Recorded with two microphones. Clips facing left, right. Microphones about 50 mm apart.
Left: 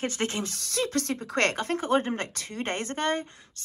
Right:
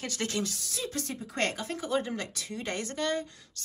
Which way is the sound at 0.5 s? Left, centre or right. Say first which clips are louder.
Left 7 dB; left.